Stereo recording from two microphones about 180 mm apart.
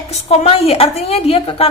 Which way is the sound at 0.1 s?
35° left (ahead or behind).